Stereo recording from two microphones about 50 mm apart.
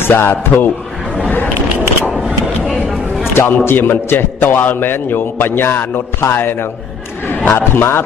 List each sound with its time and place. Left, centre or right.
0.0 s a man's voice: left
3.3 s a man's voice: left